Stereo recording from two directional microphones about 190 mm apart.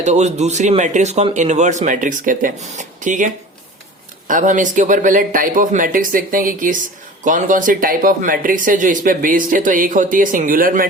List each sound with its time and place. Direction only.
0.0 s speech: 35° right (ahead or behind)
4.3 s speech: 45° right (ahead or behind)